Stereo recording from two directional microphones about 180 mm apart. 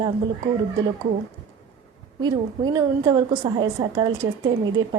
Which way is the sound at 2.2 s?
20° right (ahead or behind).